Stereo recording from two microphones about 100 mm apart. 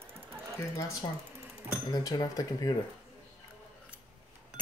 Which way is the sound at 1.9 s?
40° left (ahead or behind).